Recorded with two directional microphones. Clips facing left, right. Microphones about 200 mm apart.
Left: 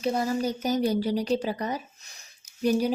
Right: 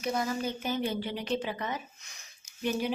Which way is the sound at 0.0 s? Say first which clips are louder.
Left 5 dB; 30° left (ahead or behind).